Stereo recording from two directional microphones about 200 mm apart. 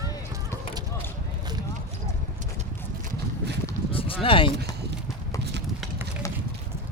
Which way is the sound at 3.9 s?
25° left (ahead or behind).